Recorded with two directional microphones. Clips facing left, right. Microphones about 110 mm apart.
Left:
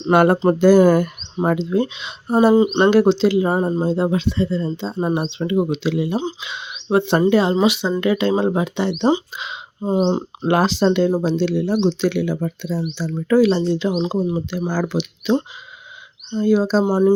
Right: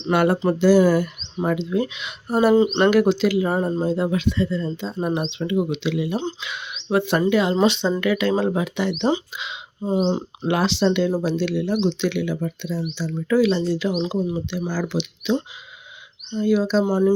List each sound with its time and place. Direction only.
0.0 s speech: 45° left (ahead or behind)
1.4 s speech: 35° left (ahead or behind)
7.5 s speech: 10° left (ahead or behind)
8.0 s speech: 25° left (ahead or behind)
9.3 s speech: 40° left (ahead or behind)
11.1 s speech: 25° left (ahead or behind); by 13.6 s 40° left (ahead or behind)
13.6 s speech: 25° left (ahead or behind); by 15.4 s 45° left (ahead or behind)
16.3 s speech: 35° left (ahead or behind)
16.8 s speech: 20° left (ahead or behind)